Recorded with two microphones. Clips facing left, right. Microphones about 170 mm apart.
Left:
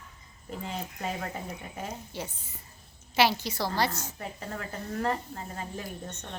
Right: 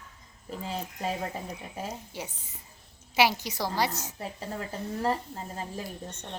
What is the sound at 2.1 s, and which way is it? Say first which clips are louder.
A woman's voice: left 1 dB; 15° right (ahead or behind).